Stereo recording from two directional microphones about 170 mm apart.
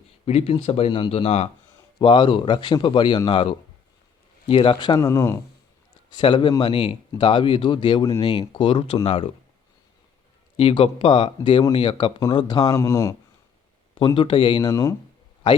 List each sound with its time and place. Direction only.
0.3 s speech: 35° left (ahead or behind)
4.9 s speech: 15° left (ahead or behind)
10.6 s speech: 35° left (ahead or behind)